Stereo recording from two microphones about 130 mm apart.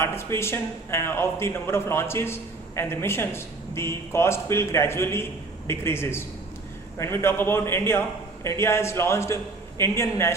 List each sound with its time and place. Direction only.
0.0 s a man's voice: 20° left (ahead or behind)